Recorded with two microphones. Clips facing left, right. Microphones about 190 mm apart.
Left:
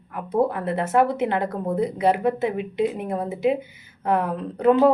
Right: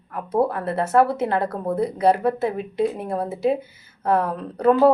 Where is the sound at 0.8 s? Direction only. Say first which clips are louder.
Right 2 dB; 40° right (ahead or behind).